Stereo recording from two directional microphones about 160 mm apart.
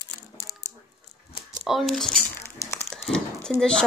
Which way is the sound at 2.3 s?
20° left (ahead or behind).